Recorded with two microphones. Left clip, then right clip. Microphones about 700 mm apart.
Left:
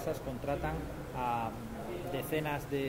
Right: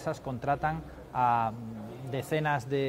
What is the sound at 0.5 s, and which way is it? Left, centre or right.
A man's voice, right.